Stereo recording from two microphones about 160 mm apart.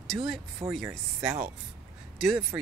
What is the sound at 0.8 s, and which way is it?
Speech, 15° right (ahead or behind).